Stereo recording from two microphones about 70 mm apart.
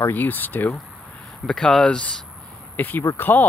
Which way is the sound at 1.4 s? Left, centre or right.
Centre.